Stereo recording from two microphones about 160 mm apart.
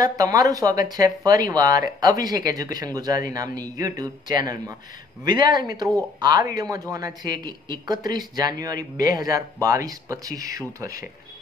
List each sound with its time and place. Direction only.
0.0 s speech: 20° right (ahead or behind)